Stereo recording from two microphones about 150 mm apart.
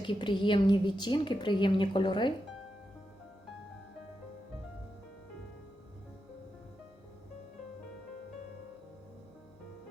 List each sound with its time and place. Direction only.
0.0 s a woman's voice: 30° left (ahead or behind)